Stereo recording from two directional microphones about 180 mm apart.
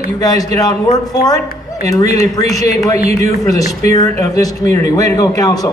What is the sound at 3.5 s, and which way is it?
Speech, 20° left (ahead or behind).